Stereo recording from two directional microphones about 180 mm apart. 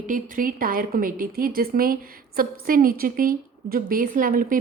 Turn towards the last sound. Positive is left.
turn(degrees=-50)  # may be behind; listen again after turning